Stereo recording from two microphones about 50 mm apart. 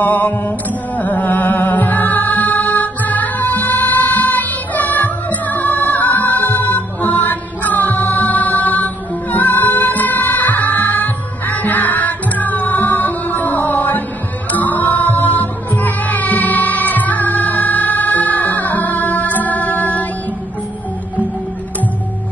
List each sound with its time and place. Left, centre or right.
0.0 s mantra: left
0.4 s music: left